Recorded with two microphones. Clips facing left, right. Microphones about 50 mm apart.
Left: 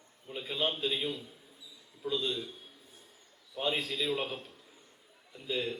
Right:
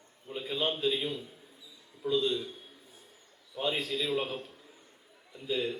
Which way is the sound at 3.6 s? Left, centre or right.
Centre.